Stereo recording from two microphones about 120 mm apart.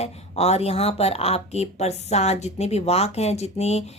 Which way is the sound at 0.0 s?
60° left (ahead or behind).